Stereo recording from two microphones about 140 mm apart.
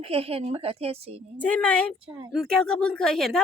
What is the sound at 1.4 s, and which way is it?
Speech, 10° left (ahead or behind).